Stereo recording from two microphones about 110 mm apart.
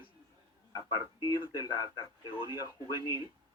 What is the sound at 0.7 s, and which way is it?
Speech, 35° left (ahead or behind).